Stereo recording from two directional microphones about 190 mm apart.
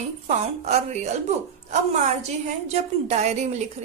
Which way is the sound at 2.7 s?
35° right (ahead or behind).